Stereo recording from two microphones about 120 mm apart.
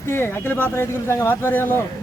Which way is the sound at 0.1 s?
20° left (ahead or behind).